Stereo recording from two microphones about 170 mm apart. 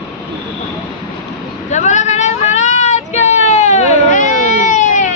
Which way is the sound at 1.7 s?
45° left (ahead or behind).